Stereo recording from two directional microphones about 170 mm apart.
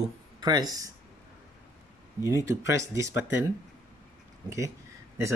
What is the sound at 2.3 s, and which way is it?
Speech, 15° right (ahead or behind).